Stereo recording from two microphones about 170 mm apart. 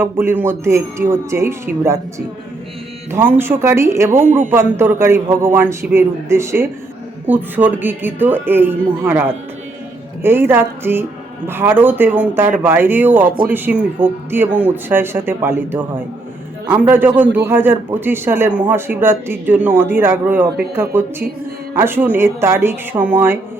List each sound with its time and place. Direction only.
0.0 s a man's voice: 10° right (ahead or behind)
13.2 s speech: 55° right (ahead or behind)
13.5 s a man's voice: 10° right (ahead or behind)